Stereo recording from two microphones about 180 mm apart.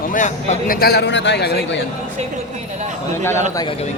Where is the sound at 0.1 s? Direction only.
45° left (ahead or behind).